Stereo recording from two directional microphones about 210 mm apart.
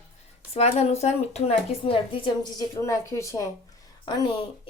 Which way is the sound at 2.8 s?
15° left (ahead or behind).